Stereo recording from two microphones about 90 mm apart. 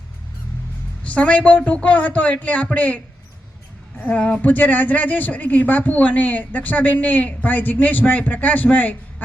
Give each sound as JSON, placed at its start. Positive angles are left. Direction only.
{"t": 1.0, "sound": "speech", "side_deg": 15}